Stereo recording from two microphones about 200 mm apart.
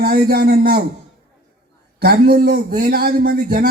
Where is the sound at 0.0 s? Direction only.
50° right (ahead or behind).